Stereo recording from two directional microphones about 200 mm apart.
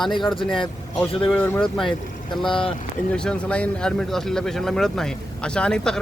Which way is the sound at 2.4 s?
25° left (ahead or behind).